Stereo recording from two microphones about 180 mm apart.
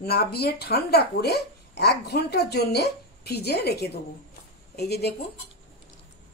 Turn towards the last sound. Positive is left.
turn(degrees=65)  # may be behind; listen again after turning